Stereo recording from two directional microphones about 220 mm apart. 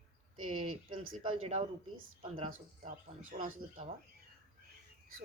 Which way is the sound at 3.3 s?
30° right (ahead or behind).